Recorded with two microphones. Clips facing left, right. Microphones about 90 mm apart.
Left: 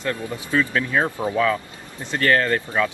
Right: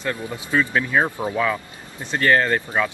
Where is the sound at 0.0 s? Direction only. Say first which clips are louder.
Left 1 dB; 20° right (ahead or behind).